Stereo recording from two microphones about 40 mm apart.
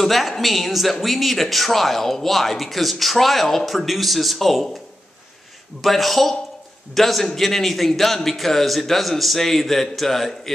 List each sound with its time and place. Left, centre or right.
0.0 s speech: centre
5.8 s speech: centre